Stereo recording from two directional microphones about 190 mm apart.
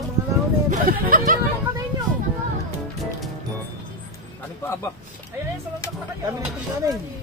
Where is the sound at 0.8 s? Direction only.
50° right (ahead or behind).